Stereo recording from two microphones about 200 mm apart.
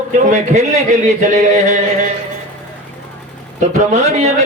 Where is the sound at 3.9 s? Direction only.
35° right (ahead or behind).